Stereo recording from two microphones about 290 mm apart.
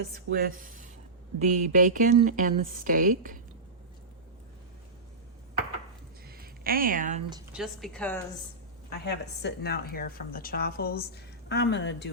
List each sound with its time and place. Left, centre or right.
0.3 s a woman's voice: right
6.2 s a sound: right
7.5 s a woman's voice: centre
9.0 s a woman's voice: left